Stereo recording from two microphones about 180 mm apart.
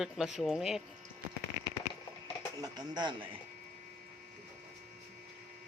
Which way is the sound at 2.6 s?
25° right (ahead or behind).